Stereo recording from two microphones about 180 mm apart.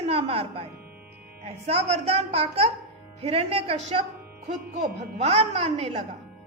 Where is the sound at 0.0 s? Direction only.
35° right (ahead or behind).